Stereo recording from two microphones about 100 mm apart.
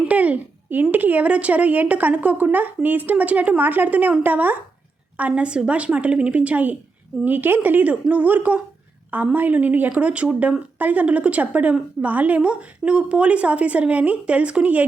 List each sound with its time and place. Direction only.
0.0 s a woman's voice: 15° right (ahead or behind)